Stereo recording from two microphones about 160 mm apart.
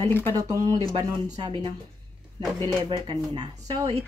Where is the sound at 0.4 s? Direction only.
25° right (ahead or behind).